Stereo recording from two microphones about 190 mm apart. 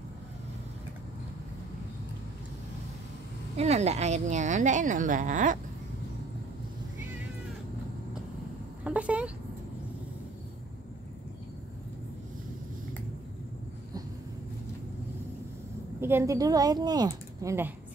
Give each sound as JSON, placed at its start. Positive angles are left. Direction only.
{"t": 3.5, "sound": "a woman's voice", "side_deg": -35}
{"t": 8.8, "sound": "a sound", "side_deg": -5}
{"t": 16.0, "sound": "speech", "side_deg": -15}